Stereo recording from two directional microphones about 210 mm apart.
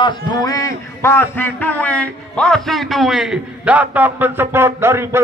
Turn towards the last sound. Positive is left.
turn(degrees=-10)  # may be behind; listen again after turning